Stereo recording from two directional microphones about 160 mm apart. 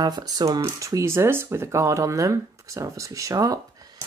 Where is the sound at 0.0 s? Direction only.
25° right (ahead or behind).